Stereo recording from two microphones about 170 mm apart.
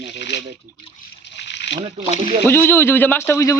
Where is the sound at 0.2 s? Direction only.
90° left.